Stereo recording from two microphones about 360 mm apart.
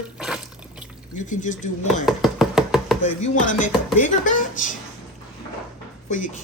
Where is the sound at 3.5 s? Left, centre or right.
Left.